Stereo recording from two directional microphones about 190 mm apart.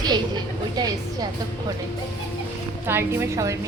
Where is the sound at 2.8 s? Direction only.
10° right (ahead or behind).